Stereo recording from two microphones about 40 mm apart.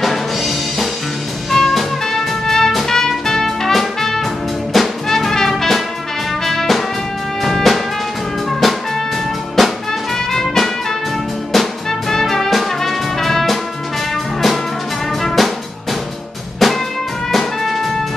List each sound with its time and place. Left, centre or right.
0.0 s music: centre
15.2 s drum kit: centre
16.5 s music: centre